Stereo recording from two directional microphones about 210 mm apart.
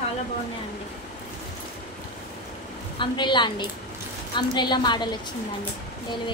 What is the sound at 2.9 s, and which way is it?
A woman's voice, 20° left (ahead or behind).